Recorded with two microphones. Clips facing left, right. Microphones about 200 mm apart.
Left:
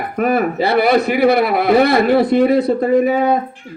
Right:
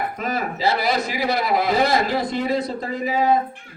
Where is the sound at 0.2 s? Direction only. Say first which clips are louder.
Left 13 dB; 60° left (ahead or behind).